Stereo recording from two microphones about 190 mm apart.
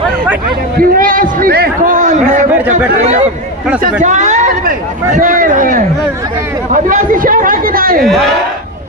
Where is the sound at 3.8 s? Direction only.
40° right (ahead or behind).